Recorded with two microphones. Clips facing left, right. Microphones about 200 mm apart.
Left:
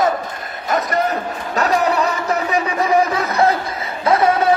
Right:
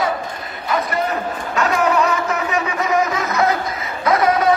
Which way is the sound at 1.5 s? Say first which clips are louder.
Even; 35° left (ahead or behind).